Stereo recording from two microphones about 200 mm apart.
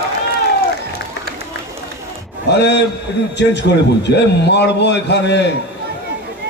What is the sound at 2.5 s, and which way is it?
A man's voice, 60° left (ahead or behind).